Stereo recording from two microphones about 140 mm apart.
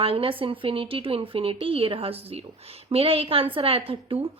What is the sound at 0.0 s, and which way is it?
A woman's voice, 40° right (ahead or behind).